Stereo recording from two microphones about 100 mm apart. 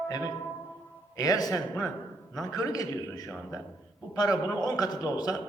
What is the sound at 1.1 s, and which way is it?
A man's voice, 40° left (ahead or behind).